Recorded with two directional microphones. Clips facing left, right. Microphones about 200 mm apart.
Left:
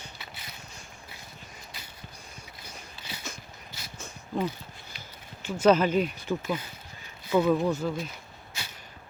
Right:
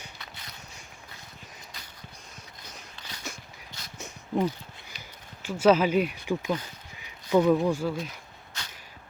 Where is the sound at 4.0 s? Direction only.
20° right (ahead or behind).